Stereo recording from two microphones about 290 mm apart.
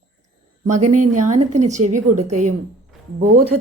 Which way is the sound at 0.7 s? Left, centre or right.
Right.